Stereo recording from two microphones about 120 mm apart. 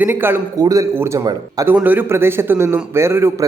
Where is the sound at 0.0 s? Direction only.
20° right (ahead or behind).